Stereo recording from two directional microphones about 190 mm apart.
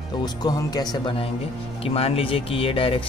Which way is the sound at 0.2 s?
20° left (ahead or behind).